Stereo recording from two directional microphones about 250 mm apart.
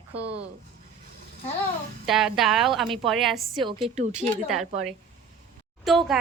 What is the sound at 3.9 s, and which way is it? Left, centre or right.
Speech, right.